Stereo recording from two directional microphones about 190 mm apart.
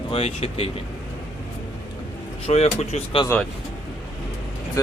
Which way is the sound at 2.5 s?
35° left (ahead or behind).